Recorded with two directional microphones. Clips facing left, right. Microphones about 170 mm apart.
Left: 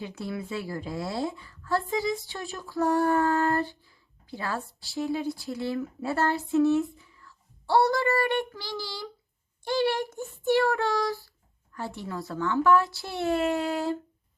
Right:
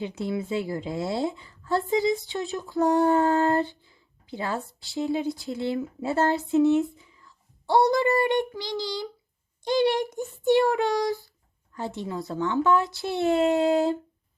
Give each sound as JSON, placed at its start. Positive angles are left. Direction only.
{"t": 0.0, "sound": "a woman's voice", "side_deg": -20}
{"t": 9.6, "sound": "child singing", "side_deg": -20}
{"t": 11.7, "sound": "a woman's voice", "side_deg": -20}